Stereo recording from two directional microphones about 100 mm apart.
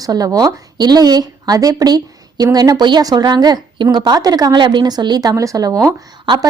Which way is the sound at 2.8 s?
45° right (ahead or behind).